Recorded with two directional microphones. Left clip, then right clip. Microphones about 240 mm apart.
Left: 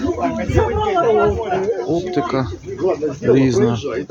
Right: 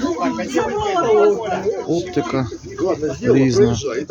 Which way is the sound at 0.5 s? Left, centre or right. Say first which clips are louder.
Left 2 dB; right.